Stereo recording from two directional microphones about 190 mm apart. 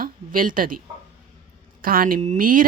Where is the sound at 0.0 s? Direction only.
45° right (ahead or behind).